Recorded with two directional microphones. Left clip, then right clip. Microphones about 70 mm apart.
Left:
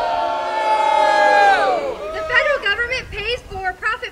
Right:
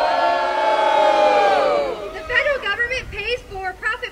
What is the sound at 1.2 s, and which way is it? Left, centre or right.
Crowd, left.